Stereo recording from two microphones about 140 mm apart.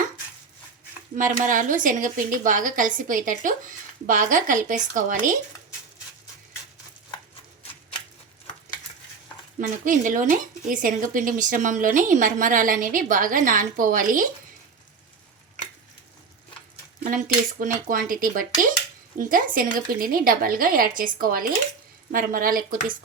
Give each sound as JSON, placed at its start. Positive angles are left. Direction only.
{"t": 1.1, "sound": "speech", "side_deg": -70}
{"t": 9.6, "sound": "speech", "side_deg": -70}
{"t": 17.0, "sound": "a woman's voice", "side_deg": -70}